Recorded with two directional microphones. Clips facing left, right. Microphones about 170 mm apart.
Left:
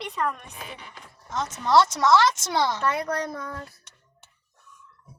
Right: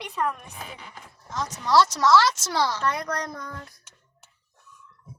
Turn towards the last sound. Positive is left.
turn(degrees=5)  # may be behind; listen again after turning